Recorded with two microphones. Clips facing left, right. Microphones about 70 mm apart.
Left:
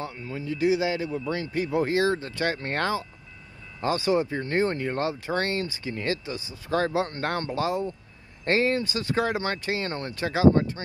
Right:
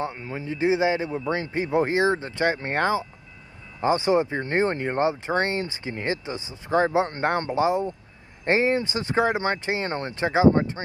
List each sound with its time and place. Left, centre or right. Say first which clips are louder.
0.0 s speech: right 3 dB; right